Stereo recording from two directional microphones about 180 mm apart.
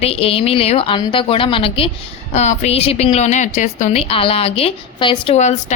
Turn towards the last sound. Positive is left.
turn(degrees=40)  # may be behind; listen again after turning